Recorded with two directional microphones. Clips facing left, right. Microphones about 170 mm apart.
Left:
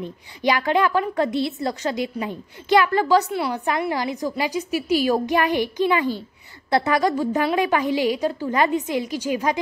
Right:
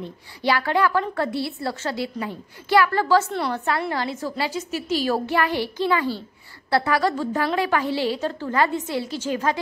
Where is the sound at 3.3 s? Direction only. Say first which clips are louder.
Left 1 dB; 5° left (ahead or behind).